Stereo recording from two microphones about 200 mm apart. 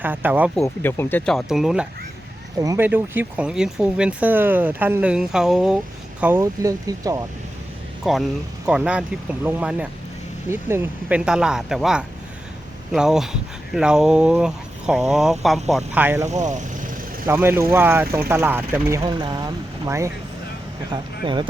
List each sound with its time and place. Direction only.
0.0 s speech: 10° right (ahead or behind)
0.6 s speech: 10° left (ahead or behind)
2.6 s speech: 15° right (ahead or behind)
8.1 s speech: centre (ahead or behind)
16.3 s speech: 35° right (ahead or behind)
17.2 s speech: 10° right (ahead or behind)